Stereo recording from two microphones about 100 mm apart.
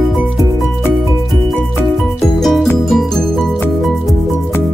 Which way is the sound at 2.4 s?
Centre (ahead or behind).